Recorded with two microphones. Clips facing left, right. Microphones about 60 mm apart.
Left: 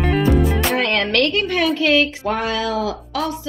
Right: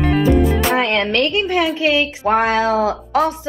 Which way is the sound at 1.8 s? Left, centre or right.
Right.